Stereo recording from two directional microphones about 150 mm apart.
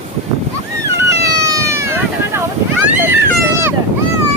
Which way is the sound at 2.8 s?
15° right (ahead or behind).